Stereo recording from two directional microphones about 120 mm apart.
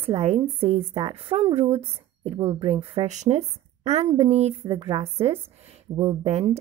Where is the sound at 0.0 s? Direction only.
55° right (ahead or behind).